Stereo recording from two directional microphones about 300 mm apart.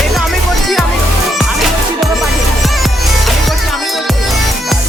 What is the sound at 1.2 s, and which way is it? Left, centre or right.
Music, centre.